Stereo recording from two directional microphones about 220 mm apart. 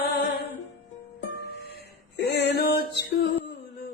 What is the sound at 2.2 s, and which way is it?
Female singing, 50° left (ahead or behind).